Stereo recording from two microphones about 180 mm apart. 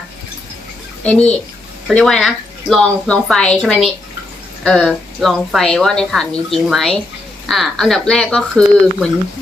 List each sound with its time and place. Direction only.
1.0 s a child's voice: 5° left (ahead or behind)